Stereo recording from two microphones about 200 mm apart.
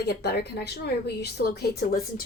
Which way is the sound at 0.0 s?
55° left (ahead or behind).